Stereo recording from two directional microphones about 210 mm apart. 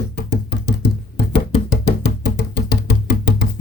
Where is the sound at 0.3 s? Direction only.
50° left (ahead or behind).